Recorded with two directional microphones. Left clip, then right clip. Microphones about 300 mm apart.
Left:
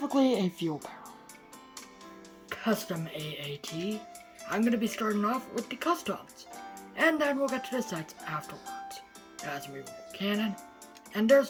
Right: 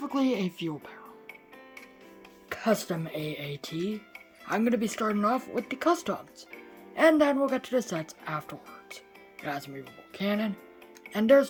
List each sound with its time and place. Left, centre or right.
0.0 s speech: centre
2.5 s speech: right
4.5 s speech: right